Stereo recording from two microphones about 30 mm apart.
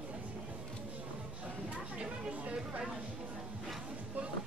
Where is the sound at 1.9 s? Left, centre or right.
Right.